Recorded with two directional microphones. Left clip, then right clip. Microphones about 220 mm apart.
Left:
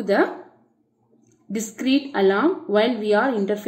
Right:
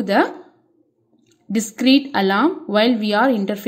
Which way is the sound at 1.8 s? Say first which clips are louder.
Right 4 dB; 45° right (ahead or behind).